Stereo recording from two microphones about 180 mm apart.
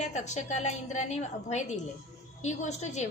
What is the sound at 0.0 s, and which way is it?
A woman's voice, 40° left (ahead or behind).